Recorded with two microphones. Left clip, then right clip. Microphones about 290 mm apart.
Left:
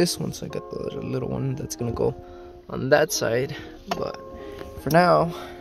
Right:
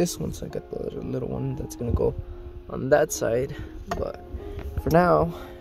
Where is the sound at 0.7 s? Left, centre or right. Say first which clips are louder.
Left 1 dB; centre.